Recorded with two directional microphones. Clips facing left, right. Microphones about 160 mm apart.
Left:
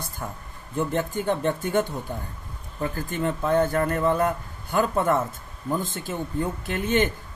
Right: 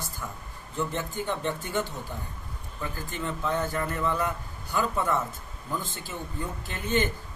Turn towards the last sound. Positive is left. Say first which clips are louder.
# left 5 dB
turn(degrees=55)  # may be behind; listen again after turning